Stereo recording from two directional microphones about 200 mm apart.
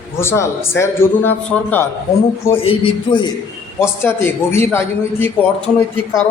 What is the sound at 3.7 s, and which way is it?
A man's voice, 10° left (ahead or behind).